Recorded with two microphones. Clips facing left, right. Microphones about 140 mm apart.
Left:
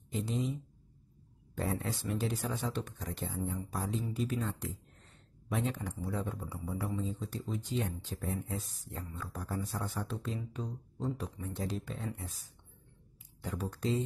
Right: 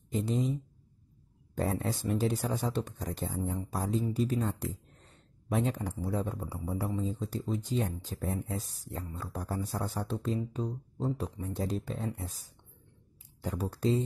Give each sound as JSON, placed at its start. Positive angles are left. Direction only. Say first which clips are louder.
{"t": 0.1, "sound": "speech", "louder": "right 4 dB", "side_deg": -40}